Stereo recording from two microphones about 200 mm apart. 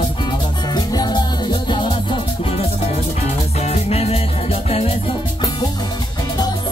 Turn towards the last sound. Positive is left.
turn(degrees=25)  # may be behind; listen again after turning